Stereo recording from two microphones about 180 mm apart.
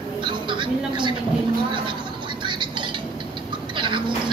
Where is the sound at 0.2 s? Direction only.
25° right (ahead or behind).